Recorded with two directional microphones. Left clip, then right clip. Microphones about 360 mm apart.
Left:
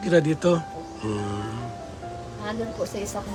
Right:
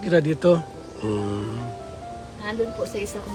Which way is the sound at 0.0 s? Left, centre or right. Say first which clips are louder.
Right 1 dB; centre.